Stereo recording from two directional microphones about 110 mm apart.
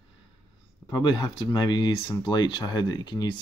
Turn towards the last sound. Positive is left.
turn(degrees=40)  # may be behind; listen again after turning